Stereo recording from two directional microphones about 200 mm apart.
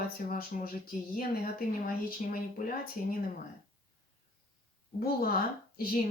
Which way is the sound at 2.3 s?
45° left (ahead or behind).